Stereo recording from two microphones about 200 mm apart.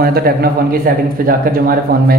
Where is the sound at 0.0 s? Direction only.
50° right (ahead or behind).